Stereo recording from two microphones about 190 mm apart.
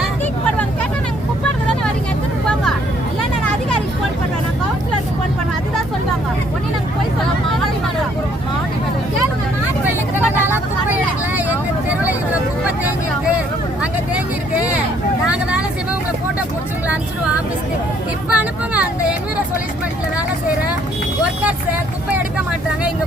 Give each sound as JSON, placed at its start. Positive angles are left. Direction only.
{"t": 11.3, "sound": "vehicle", "side_deg": -10}
{"t": 15.3, "sound": "vehicle", "side_deg": -5}
{"t": 18.3, "sound": "vehicle", "side_deg": -5}